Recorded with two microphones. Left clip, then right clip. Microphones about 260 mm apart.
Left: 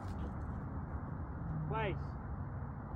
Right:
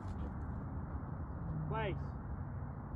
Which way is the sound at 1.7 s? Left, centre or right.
Centre.